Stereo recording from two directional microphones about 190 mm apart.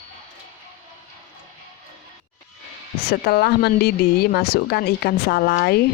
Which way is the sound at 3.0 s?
55° left (ahead or behind).